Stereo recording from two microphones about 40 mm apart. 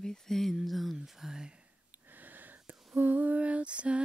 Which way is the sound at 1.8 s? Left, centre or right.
Right.